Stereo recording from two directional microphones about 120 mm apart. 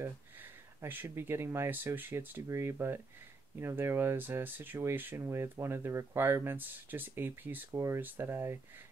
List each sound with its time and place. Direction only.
0.0 s speech: 20° right (ahead or behind)